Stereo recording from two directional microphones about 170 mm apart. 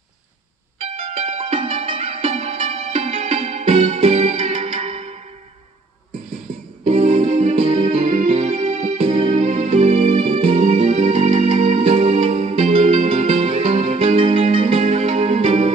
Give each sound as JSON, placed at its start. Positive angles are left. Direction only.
{"t": 0.7, "sound": "music", "side_deg": -35}
{"t": 6.8, "sound": "music", "side_deg": -40}